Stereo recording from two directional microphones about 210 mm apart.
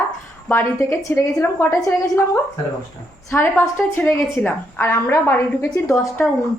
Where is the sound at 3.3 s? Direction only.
10° left (ahead or behind).